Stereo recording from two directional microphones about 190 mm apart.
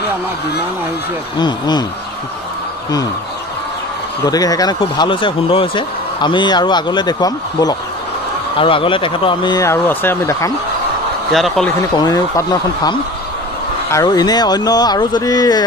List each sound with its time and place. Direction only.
1.4 s speech: 20° left (ahead or behind)
4.3 s speech: 20° left (ahead or behind)
11.3 s speech: centre (ahead or behind)
12.0 s speech: 20° left (ahead or behind)